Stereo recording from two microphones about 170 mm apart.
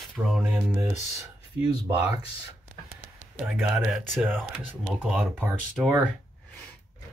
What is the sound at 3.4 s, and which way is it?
Speech, centre (ahead or behind).